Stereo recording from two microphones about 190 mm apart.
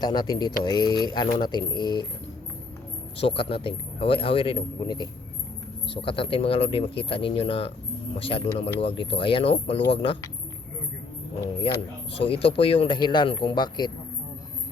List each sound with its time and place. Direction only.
0.0 s speech: 20° left (ahead or behind)
3.2 s speech: 30° left (ahead or behind)
12.2 s speech: 30° left (ahead or behind)